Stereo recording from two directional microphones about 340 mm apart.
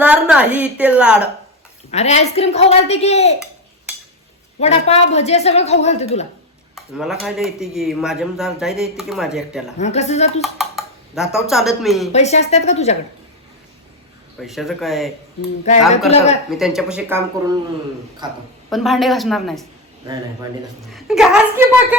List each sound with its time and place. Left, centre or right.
0.0 s speech: centre
1.9 s a woman's voice: centre
4.6 s a woman's voice: centre
6.7 s speech: centre
9.7 s a woman's voice: centre
10.4 s speech: centre
12.1 s a woman's voice: centre
14.4 s speech: centre
16.0 s a woman's voice: centre
16.5 s a woman's voice: centre
18.7 s speech: centre
20.9 s speech: centre